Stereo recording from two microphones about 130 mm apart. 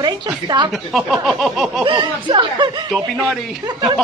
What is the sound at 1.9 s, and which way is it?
Speech, 40° right (ahead or behind).